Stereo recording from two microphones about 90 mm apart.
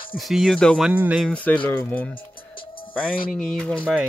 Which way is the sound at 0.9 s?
20° right (ahead or behind).